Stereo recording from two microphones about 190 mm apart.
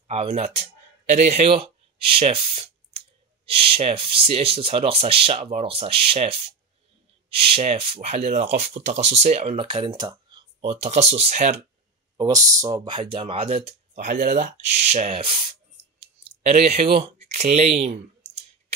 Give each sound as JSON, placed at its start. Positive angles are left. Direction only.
{"t": 0.1, "sound": "speech", "side_deg": -35}
{"t": 12.2, "sound": "speech", "side_deg": -20}
{"t": 13.9, "sound": "speech", "side_deg": -45}